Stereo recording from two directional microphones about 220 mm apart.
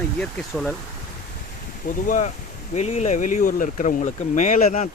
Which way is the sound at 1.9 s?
35° left (ahead or behind).